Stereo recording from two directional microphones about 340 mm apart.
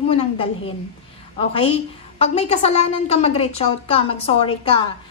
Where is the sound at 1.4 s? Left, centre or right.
Centre.